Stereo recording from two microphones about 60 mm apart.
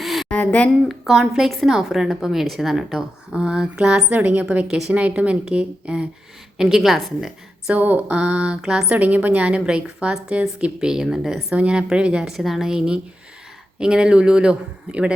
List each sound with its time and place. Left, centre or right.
0.0 s a sound: centre
0.3 s speech: left
0.9 s a woman's voice: centre; by 6.1 s right
6.6 s a woman's voice: centre
7.7 s speech: right
9.0 s a woman's voice: right